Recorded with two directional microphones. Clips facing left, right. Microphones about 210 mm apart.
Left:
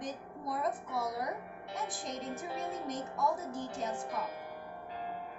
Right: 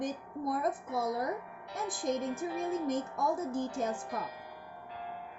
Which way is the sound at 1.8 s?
50° right (ahead or behind).